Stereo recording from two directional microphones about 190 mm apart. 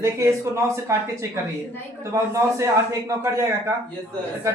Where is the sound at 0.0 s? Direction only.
15° right (ahead or behind).